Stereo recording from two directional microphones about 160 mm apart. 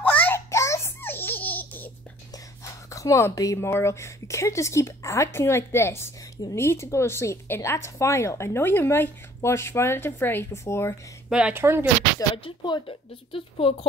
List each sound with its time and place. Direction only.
0.0 s baby laughter: 10° left (ahead or behind)
2.6 s speech: 20° left (ahead or behind)
11.2 s speech: 5° right (ahead or behind)
12.4 s speech: 30° left (ahead or behind)